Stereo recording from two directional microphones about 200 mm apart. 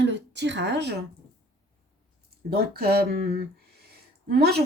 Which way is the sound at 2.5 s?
50° right (ahead or behind).